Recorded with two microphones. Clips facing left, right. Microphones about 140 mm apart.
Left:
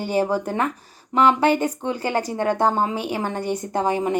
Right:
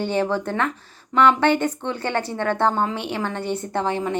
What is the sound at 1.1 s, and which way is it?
Speech, 35° left (ahead or behind).